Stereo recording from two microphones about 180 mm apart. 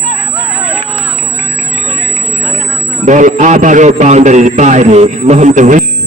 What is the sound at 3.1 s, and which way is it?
A man's voice, 45° right (ahead or behind).